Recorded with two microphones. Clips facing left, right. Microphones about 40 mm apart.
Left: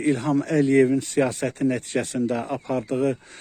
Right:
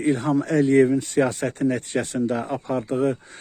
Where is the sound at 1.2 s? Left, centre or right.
Right.